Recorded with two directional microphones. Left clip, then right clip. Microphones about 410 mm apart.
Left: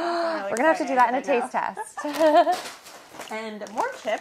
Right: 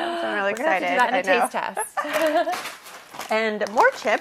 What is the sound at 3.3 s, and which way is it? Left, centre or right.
Speech, right.